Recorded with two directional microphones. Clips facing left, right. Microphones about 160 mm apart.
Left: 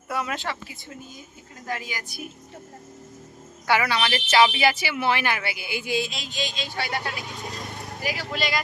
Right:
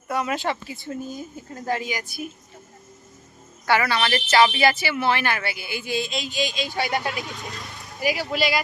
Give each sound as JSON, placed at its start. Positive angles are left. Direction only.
{"t": 0.1, "sound": "a sound", "side_deg": 0}
{"t": 0.3, "sound": "a woman's voice", "side_deg": -20}
{"t": 2.0, "sound": "a woman's voice", "side_deg": 0}
{"t": 3.7, "sound": "speech", "side_deg": 10}
{"t": 6.3, "sound": "speech", "side_deg": -10}
{"t": 7.5, "sound": "vehicle", "side_deg": 50}
{"t": 8.0, "sound": "speech", "side_deg": -10}